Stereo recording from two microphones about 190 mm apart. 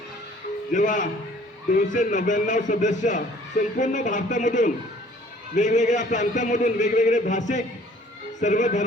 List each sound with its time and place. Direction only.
0.7 s a man's voice: 40° left (ahead or behind)